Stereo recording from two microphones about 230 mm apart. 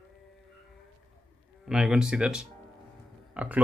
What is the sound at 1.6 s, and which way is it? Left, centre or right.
Speech, centre.